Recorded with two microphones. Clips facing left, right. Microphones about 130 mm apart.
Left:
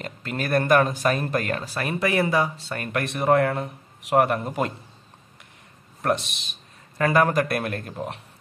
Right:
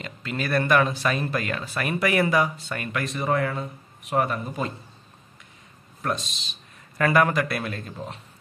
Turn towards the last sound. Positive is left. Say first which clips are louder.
# left 3 dB
turn(degrees=60)  # may be behind; listen again after turning